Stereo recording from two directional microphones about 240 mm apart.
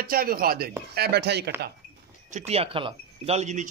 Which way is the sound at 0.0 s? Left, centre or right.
Right.